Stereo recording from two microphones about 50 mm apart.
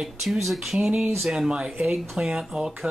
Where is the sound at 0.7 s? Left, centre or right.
Centre.